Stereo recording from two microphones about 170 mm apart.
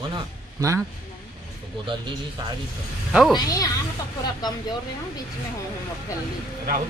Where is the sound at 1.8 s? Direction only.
30° right (ahead or behind).